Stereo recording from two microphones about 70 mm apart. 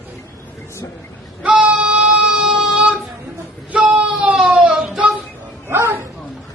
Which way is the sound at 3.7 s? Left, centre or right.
Centre.